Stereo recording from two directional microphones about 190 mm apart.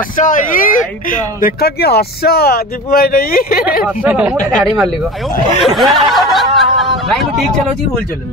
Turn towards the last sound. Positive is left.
turn(degrees=0)  # may be behind; listen again after turning